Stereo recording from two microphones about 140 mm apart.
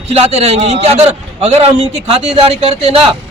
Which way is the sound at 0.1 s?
45° right (ahead or behind).